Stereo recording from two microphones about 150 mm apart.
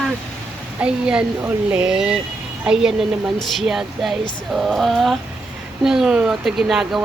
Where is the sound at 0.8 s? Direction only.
5° right (ahead or behind).